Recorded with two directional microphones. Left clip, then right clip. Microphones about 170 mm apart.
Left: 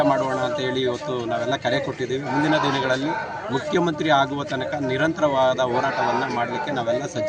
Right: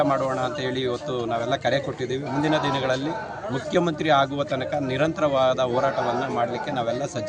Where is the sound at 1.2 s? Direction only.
5° right (ahead or behind).